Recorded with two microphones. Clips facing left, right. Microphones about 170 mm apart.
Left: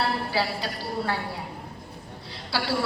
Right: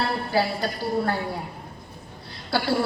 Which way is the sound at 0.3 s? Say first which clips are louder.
Right 4 dB; 50° right (ahead or behind).